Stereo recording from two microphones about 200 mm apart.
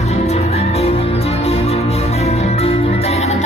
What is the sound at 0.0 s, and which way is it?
Music, 35° left (ahead or behind).